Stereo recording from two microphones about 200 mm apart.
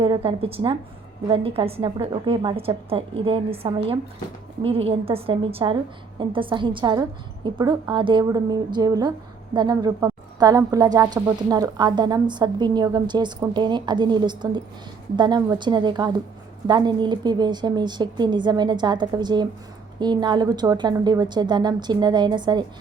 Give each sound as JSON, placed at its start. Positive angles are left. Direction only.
{"t": 0.0, "sound": "a woman's voice", "side_deg": -25}